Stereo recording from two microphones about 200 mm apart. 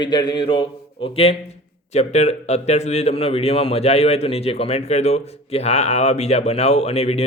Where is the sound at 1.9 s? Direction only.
35° left (ahead or behind).